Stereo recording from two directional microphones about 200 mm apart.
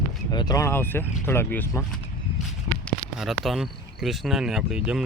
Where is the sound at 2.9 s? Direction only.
Centre (ahead or behind).